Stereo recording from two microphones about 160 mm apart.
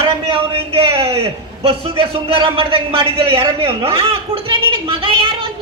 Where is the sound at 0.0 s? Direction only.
35° right (ahead or behind).